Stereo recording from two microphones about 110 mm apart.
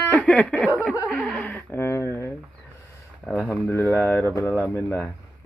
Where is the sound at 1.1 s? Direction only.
10° left (ahead or behind).